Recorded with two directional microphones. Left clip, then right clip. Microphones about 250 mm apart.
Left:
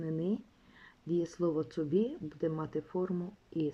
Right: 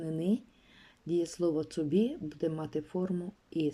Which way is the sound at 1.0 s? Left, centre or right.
Centre.